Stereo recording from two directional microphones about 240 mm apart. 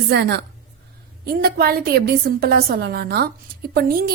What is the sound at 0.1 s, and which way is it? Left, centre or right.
A woman's voice, right.